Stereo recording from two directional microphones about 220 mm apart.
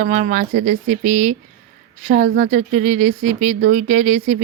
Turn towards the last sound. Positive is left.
turn(degrees=-35)  # may be behind; listen again after turning